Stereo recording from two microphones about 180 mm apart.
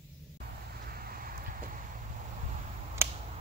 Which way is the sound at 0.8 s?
55° right (ahead or behind).